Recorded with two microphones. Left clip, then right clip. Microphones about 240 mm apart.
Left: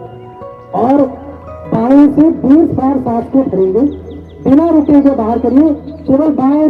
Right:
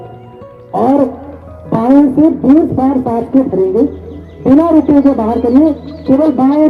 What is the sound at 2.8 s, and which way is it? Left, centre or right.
Speech, right.